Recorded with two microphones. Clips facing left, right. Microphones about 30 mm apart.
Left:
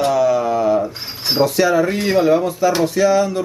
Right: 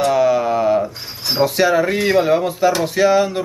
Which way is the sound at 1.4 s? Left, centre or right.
Centre.